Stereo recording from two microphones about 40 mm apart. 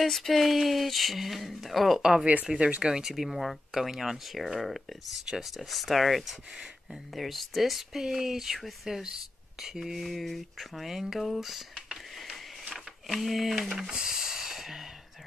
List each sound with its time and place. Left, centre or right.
0.0 s speech: centre
2.0 s speech: centre
2.6 s speech: right
2.9 s speech: centre
3.3 s speech: centre
6.5 s speech: right
7.2 s speech: centre
8.0 s speech: centre
12.7 s a sound: centre